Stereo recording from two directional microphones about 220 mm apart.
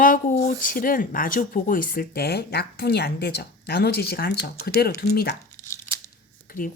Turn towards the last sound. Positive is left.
turn(degrees=40)  # may be behind; listen again after turning